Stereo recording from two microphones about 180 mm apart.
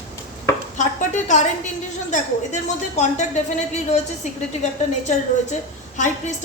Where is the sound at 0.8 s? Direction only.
40° left (ahead or behind).